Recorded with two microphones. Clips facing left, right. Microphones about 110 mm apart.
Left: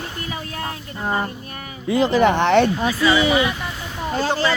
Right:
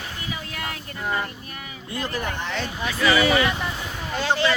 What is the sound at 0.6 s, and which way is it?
Speech, 35° left (ahead or behind).